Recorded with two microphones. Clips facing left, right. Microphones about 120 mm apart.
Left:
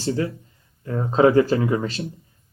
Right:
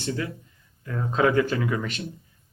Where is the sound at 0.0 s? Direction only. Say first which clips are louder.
Left 6 dB; 35° left (ahead or behind).